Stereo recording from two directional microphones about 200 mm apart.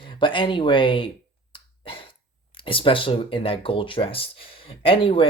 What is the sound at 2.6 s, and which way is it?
Speech, 25° left (ahead or behind).